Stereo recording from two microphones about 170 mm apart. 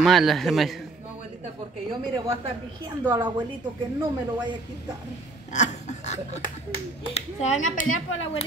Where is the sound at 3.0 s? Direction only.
25° right (ahead or behind).